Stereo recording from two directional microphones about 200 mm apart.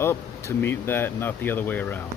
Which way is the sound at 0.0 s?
15° left (ahead or behind).